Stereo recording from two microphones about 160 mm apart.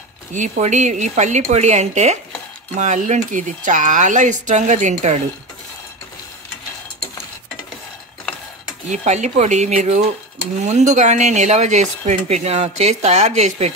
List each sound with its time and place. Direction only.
0.3 s speech: 50° right (ahead or behind)
8.9 s speech: 45° right (ahead or behind)